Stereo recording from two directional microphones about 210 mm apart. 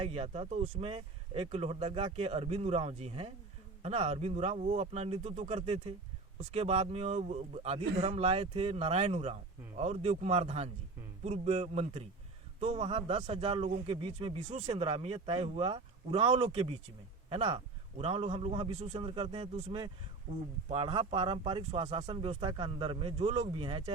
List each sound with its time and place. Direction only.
0.0 s a man's voice: 30° right (ahead or behind)